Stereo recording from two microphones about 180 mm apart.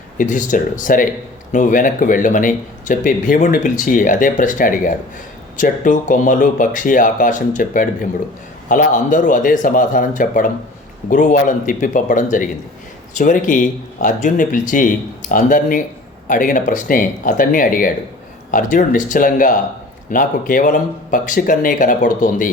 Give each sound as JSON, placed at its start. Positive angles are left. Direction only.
{"t": 0.2, "sound": "speech", "side_deg": 45}